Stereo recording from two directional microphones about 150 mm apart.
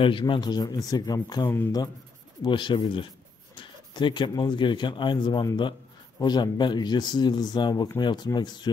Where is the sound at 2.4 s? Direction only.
35° left (ahead or behind).